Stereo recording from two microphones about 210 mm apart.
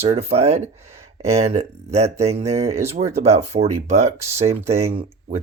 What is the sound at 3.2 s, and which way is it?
Speech, 30° right (ahead or behind).